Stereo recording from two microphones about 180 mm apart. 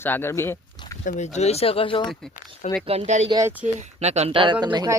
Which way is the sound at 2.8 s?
35° right (ahead or behind).